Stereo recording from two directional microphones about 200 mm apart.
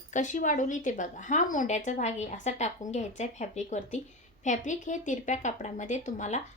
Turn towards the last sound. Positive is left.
turn(degrees=35)  # may be behind; listen again after turning